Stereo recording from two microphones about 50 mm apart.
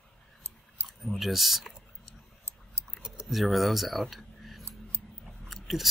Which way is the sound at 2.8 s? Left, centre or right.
Right.